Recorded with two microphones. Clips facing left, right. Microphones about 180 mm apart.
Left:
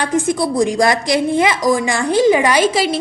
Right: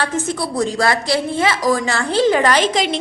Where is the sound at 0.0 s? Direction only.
15° left (ahead or behind).